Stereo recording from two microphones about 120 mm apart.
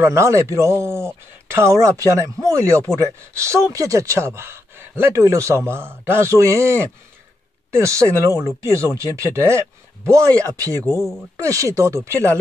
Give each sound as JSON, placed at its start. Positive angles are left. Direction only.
{"t": 0.0, "sound": "speech", "side_deg": -25}